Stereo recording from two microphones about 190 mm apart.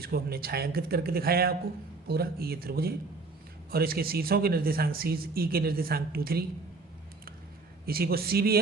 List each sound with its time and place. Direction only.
0.0 s speech: 55° right (ahead or behind)
7.9 s speech: 50° right (ahead or behind)